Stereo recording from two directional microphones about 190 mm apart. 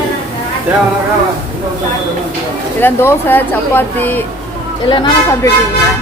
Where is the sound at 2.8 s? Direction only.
10° left (ahead or behind).